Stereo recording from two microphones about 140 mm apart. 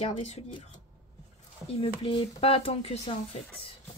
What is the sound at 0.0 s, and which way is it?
Speech, 45° left (ahead or behind).